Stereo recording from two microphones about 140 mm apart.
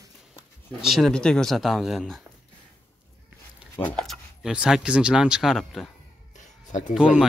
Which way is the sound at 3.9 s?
Centre (ahead or behind).